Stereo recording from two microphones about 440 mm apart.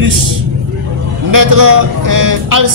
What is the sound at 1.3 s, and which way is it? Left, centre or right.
Speech, right.